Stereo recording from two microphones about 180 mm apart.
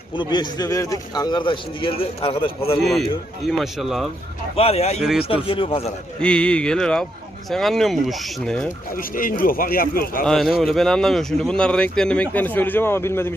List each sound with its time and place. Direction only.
0.2 s a man's voice: 25° left (ahead or behind)
2.8 s speech: centre (ahead or behind)
4.5 s speech: 35° left (ahead or behind)
4.9 s speech: centre (ahead or behind)
5.3 s a man's voice: 30° left (ahead or behind)
6.1 s speech: 5° left (ahead or behind)
9.0 s a man's voice: 50° left (ahead or behind)
10.2 s speech: centre (ahead or behind)